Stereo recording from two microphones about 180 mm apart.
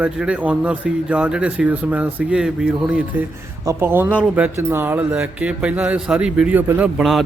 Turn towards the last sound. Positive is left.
turn(degrees=-5)  # may be behind; listen again after turning